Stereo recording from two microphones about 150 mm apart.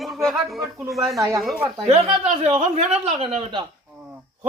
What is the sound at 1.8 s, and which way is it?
Speech, 35° right (ahead or behind).